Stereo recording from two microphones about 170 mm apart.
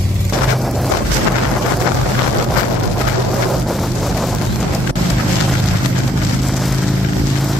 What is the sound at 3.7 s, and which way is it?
Vehicle, centre (ahead or behind).